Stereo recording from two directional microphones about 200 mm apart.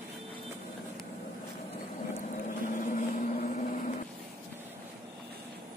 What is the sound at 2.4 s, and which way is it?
Vehicle, 40° left (ahead or behind).